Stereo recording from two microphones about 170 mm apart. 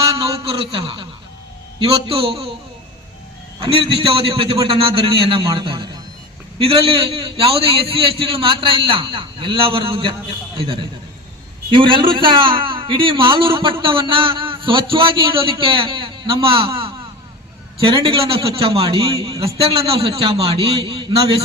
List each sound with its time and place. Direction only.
0.0 s a sound: 35° right (ahead or behind)
1.8 s a man's voice: 35° right (ahead or behind)
3.6 s a man's voice: 35° right (ahead or behind)
11.7 s a man's voice: 30° right (ahead or behind)
17.9 s a man's voice: 30° right (ahead or behind)